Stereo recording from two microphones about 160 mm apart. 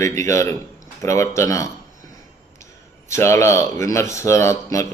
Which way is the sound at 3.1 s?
15° left (ahead or behind).